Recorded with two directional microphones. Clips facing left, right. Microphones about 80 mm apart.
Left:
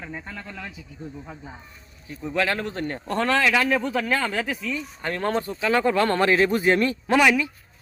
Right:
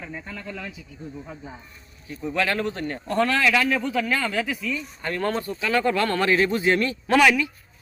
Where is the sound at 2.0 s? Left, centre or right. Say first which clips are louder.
Even; left.